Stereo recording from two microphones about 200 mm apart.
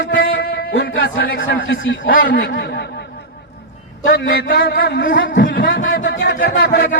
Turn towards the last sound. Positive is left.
turn(degrees=50)  # may be behind; listen again after turning